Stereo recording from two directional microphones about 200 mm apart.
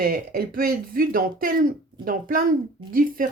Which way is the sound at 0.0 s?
50° right (ahead or behind).